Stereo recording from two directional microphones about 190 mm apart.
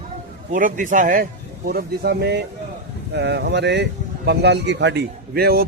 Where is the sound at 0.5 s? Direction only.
45° right (ahead or behind).